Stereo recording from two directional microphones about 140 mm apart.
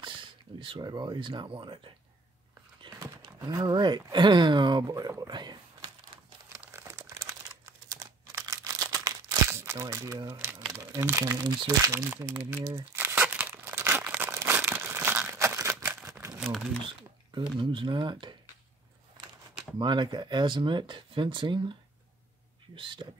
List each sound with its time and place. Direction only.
0.6 s speech: 35° right (ahead or behind)
3.4 s speech: 30° right (ahead or behind)
6.1 s crumpling: 40° right (ahead or behind)
6.6 s crumpling: 20° right (ahead or behind)
7.9 s a sound: 25° right (ahead or behind)
10.2 s speech: 15° right (ahead or behind)
12.7 s crumpling: 15° right (ahead or behind)
16.3 s crumpling: centre (ahead or behind)
17.3 s speech: 35° right (ahead or behind)
19.8 s speech: 35° right (ahead or behind)
22.8 s speech: 35° right (ahead or behind)